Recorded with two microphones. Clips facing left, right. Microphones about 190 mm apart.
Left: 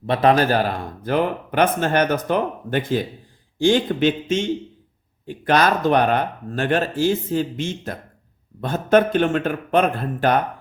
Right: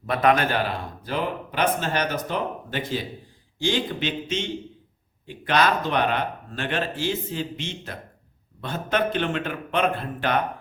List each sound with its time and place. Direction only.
0.0 s a man's voice: 30° left (ahead or behind)